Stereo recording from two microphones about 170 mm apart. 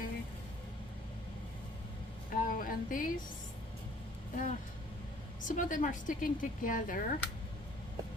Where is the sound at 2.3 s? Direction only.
55° left (ahead or behind).